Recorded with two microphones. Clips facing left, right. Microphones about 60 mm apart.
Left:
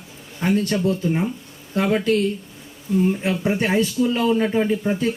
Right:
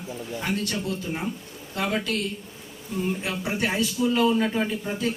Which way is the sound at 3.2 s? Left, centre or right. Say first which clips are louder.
Left 6 dB; left.